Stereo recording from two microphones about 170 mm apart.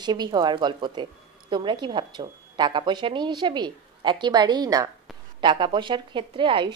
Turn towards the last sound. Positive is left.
turn(degrees=-30)  # may be behind; listen again after turning